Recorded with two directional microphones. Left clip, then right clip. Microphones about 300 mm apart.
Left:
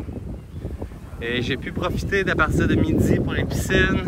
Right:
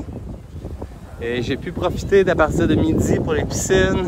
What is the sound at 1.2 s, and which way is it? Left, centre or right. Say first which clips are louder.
Speech: right 2 dB; centre.